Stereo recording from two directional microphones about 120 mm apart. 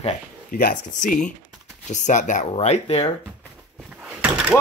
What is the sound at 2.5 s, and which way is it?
Speech, 60° left (ahead or behind).